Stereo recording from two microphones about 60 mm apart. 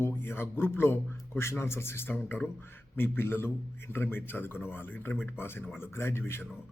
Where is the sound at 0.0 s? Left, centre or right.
Left.